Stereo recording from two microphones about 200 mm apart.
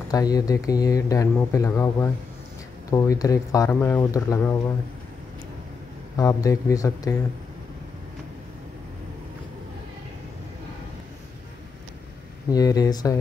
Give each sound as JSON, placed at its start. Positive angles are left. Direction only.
{"t": 0.1, "sound": "speech", "side_deg": 20}
{"t": 6.1, "sound": "speech", "side_deg": 15}
{"t": 12.4, "sound": "speech", "side_deg": 20}